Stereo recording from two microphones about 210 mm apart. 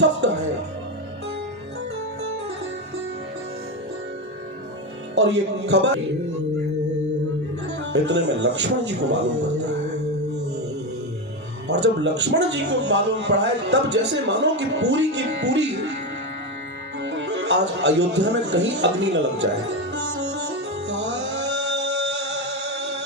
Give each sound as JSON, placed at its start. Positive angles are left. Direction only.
{"t": 5.1, "sound": "a man's voice", "side_deg": -55}
{"t": 7.9, "sound": "a man's voice", "side_deg": -55}
{"t": 11.7, "sound": "a man's voice", "side_deg": -55}
{"t": 17.0, "sound": "speech", "side_deg": -55}
{"t": 19.9, "sound": "music", "side_deg": -55}